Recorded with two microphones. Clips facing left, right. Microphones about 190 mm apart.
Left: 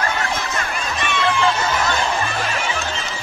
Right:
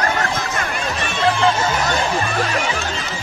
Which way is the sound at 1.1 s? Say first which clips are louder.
Right 2 dB; 35° right (ahead or behind).